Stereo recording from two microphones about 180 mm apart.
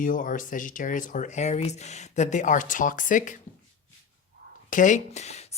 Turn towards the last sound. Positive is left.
turn(degrees=35)  # may be behind; listen again after turning